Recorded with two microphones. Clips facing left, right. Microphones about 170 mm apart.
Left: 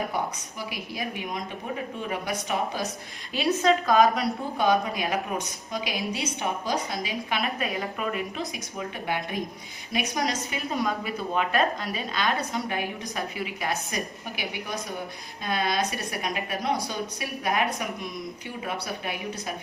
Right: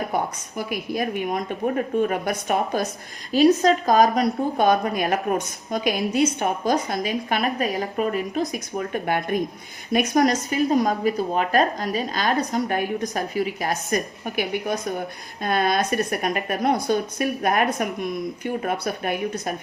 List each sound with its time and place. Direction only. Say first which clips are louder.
0.1 s a woman's voice: right 5 dB; 50° right (ahead or behind)
3.3 s a woman's voice: right 6 dB; 40° right (ahead or behind)
8.8 s a woman's voice: right 5 dB; 50° right (ahead or behind)